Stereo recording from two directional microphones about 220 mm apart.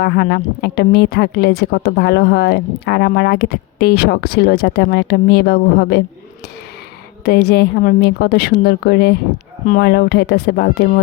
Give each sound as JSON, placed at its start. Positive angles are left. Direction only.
{"t": 0.0, "sound": "a woman's voice", "side_deg": 45}
{"t": 7.3, "sound": "a woman's voice", "side_deg": 45}